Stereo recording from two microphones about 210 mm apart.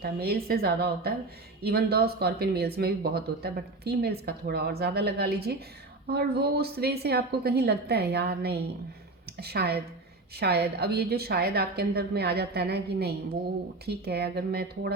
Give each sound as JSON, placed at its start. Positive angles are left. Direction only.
{"t": 0.0, "sound": "speech", "side_deg": -50}